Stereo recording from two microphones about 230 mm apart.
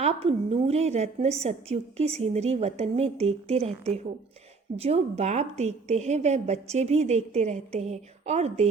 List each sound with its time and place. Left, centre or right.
0.0 s a woman's voice: right